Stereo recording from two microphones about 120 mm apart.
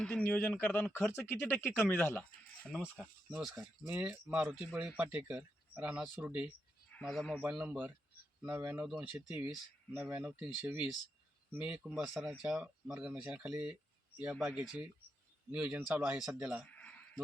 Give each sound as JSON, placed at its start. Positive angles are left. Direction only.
{"t": 0.0, "sound": "speech", "side_deg": 10}
{"t": 3.3, "sound": "speech", "side_deg": -10}
{"t": 7.0, "sound": "speech", "side_deg": 0}
{"t": 7.4, "sound": "speech", "side_deg": -10}
{"t": 11.9, "sound": "speech", "side_deg": 0}
{"t": 16.6, "sound": "bleat", "side_deg": 10}